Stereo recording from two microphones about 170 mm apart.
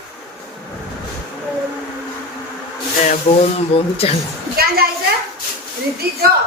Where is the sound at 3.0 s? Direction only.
40° left (ahead or behind).